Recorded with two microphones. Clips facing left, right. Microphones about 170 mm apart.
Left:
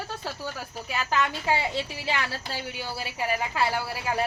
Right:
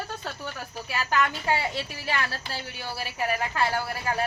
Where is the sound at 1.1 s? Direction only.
15° left (ahead or behind).